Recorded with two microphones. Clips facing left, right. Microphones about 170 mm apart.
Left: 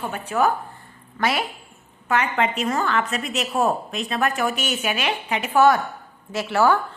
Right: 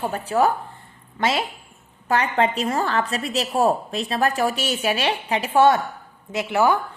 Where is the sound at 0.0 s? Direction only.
35° right (ahead or behind).